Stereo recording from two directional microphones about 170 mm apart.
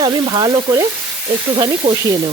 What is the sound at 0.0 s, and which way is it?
Speech, 25° right (ahead or behind).